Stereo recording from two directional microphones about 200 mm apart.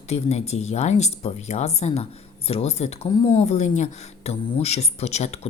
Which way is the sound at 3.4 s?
35° left (ahead or behind).